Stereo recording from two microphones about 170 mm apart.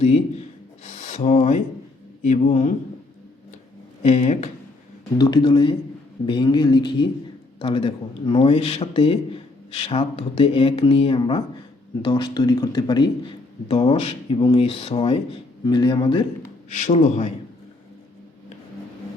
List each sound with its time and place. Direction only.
0.9 s a sound: 45° left (ahead or behind)
2.2 s speech: 40° left (ahead or behind)
4.0 s speech: 45° left (ahead or behind)
5.1 s a man's voice: 25° left (ahead or behind)
16.6 s speech: 45° left (ahead or behind)